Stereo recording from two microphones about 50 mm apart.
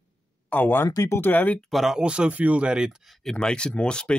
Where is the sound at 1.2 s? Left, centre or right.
Left.